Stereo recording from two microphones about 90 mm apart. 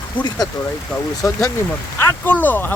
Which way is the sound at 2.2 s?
20° left (ahead or behind).